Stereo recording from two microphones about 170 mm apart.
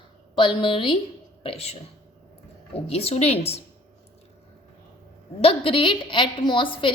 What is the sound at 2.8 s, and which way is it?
Speech, 35° left (ahead or behind).